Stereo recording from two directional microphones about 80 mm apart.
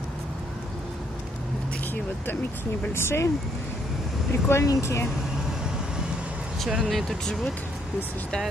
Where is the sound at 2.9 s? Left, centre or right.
Left.